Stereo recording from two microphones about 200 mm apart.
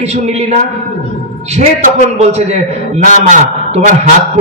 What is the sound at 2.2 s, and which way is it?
A man's voice, 35° right (ahead or behind).